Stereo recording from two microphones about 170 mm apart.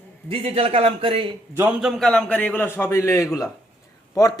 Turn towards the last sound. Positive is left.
turn(degrees=20)  # may be behind; listen again after turning